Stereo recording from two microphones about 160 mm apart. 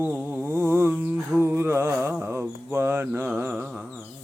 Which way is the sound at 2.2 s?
15° right (ahead or behind).